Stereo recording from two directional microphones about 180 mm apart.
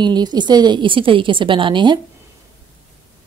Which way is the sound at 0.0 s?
25° right (ahead or behind).